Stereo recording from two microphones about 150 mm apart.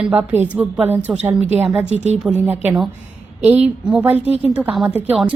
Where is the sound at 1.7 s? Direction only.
45° right (ahead or behind).